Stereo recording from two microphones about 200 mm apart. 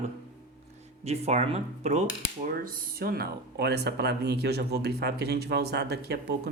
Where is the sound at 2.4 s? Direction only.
45° right (ahead or behind).